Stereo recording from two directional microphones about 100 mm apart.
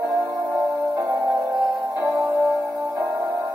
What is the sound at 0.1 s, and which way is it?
Music, 40° right (ahead or behind).